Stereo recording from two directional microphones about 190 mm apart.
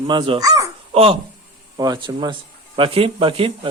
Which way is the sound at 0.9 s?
30° right (ahead or behind).